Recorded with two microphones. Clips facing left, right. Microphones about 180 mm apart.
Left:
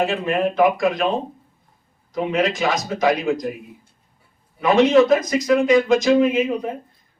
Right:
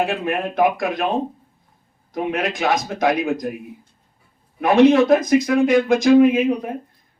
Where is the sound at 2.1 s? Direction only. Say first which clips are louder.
Left 2 dB; 60° right (ahead or behind).